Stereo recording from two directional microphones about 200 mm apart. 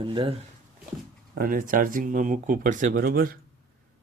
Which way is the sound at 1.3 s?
45° right (ahead or behind).